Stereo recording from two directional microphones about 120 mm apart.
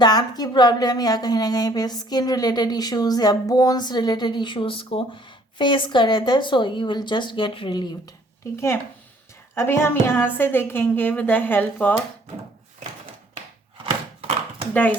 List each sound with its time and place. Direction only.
0.0 s a woman's voice: 35° left (ahead or behind)
8.5 s a woman's voice: 20° left (ahead or behind)
14.7 s speech: 15° left (ahead or behind)